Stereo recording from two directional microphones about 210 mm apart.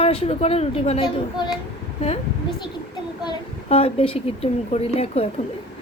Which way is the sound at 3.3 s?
25° left (ahead or behind).